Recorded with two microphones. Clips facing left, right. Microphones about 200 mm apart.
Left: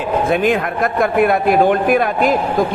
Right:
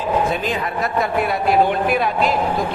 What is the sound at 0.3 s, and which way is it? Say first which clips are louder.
A man's voice: left 7 dB; 55° left (ahead or behind).